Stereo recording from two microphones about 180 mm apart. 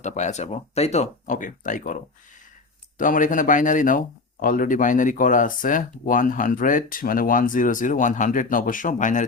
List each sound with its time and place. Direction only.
0.0 s speech: 40° left (ahead or behind)
3.0 s speech: 45° left (ahead or behind)